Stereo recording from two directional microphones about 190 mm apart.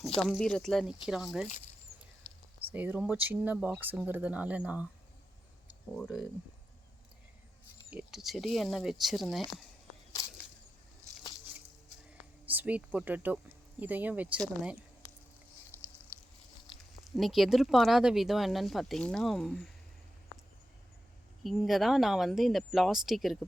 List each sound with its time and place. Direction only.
0.3 s speech: 5° left (ahead or behind)
2.7 s speech: 10° right (ahead or behind)
7.9 s speech: centre (ahead or behind)
12.5 s speech: 10° right (ahead or behind)
17.2 s speech: centre (ahead or behind)
21.4 s speech: centre (ahead or behind)